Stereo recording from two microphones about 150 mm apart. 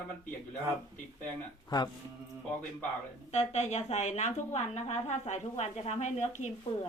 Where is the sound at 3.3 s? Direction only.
45° left (ahead or behind).